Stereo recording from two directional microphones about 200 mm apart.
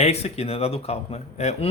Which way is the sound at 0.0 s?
30° left (ahead or behind).